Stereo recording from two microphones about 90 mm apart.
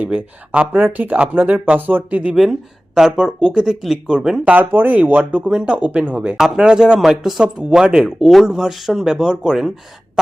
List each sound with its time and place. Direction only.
0.0 s speech: 15° right (ahead or behind)
2.3 s speech: 5° right (ahead or behind)
4.5 s speech: 20° right (ahead or behind); by 9.7 s 5° right (ahead or behind)